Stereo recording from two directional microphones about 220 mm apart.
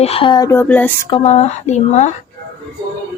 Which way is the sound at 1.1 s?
25° left (ahead or behind).